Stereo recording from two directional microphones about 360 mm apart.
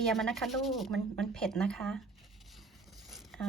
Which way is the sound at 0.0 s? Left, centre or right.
Centre.